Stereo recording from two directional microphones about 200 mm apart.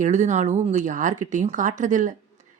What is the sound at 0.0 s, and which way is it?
Speech, 35° right (ahead or behind).